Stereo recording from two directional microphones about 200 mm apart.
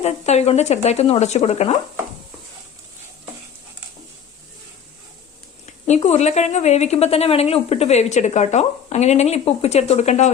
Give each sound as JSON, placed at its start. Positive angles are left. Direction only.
{"t": 0.0, "sound": "a woman's voice", "side_deg": 35}
{"t": 5.6, "sound": "a woman's voice", "side_deg": 35}